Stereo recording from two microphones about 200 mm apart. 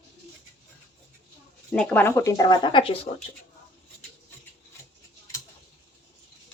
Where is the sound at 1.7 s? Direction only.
5° left (ahead or behind); by 3.0 s 25° left (ahead or behind).